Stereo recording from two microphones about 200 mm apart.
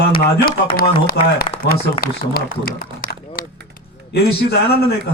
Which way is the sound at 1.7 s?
50° left (ahead or behind).